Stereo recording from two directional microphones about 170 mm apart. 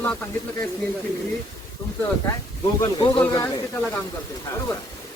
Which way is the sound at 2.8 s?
25° left (ahead or behind).